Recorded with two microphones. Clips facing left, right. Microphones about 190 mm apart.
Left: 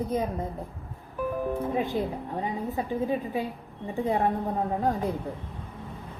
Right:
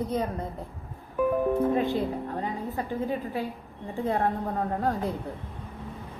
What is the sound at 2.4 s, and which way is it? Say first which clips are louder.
A woman's voice: left 1 dB; 15° left (ahead or behind).